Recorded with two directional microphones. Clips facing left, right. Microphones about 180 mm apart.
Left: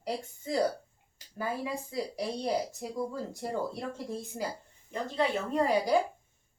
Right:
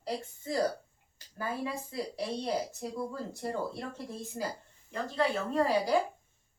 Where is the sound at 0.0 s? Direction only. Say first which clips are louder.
Left 1 dB; 15° left (ahead or behind).